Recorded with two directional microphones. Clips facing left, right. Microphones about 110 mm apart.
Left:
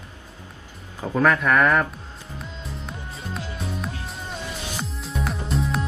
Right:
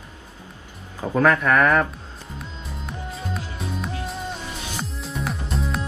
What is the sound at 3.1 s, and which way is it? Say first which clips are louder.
Music: even; centre (ahead or behind).